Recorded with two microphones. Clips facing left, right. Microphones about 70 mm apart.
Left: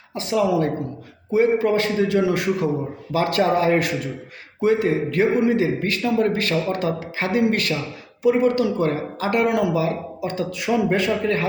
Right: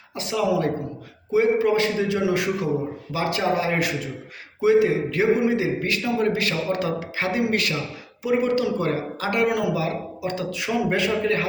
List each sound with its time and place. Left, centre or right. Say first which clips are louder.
0.1 s a man's voice: left 3 dB; left